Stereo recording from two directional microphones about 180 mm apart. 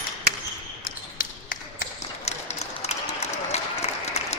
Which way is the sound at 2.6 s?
35° left (ahead or behind).